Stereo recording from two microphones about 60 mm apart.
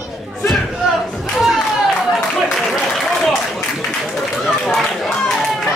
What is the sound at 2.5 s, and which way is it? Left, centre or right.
Applause, centre.